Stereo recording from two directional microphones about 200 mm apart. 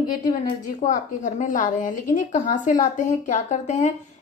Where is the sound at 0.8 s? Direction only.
40° left (ahead or behind).